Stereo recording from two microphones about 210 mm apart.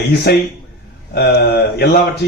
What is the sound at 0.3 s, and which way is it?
Speech, 50° left (ahead or behind).